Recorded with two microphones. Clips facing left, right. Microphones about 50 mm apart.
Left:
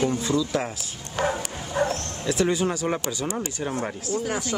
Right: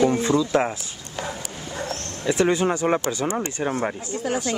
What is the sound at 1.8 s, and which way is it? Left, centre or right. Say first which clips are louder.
Bow-wow: left 8 dB; left.